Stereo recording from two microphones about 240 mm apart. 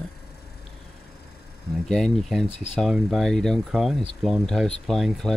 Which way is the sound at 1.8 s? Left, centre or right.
Centre.